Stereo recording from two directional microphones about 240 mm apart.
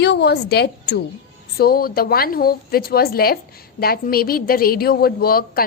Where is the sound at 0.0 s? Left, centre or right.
Left.